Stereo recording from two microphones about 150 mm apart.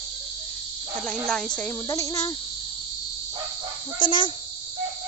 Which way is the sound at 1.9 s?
20° left (ahead or behind).